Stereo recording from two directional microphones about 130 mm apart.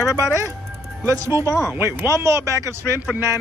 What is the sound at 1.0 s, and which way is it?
Speech, 20° right (ahead or behind).